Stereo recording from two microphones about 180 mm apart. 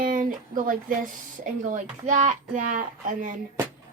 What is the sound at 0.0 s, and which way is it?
A child's voice, 50° right (ahead or behind).